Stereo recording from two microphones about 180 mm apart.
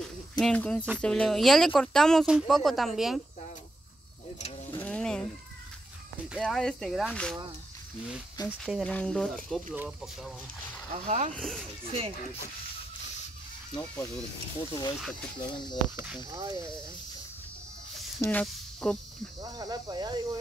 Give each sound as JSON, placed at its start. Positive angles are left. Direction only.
{"t": 0.0, "sound": "a sound", "side_deg": 5}
{"t": 0.9, "sound": "speech", "side_deg": 5}
{"t": 4.7, "sound": "a sound", "side_deg": 5}
{"t": 6.2, "sound": "speech", "side_deg": 0}
{"t": 8.5, "sound": "speech", "side_deg": -5}
{"t": 8.8, "sound": "speech", "side_deg": 5}
{"t": 11.1, "sound": "speech", "side_deg": -40}
{"t": 11.3, "sound": "speech", "side_deg": 0}
{"t": 14.6, "sound": "speech", "side_deg": 25}
{"t": 16.3, "sound": "speech", "side_deg": -20}
{"t": 18.2, "sound": "speech", "side_deg": 5}
{"t": 19.4, "sound": "speech", "side_deg": -20}